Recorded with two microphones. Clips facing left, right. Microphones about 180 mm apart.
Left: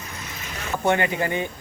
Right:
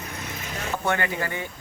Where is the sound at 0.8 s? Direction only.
20° left (ahead or behind).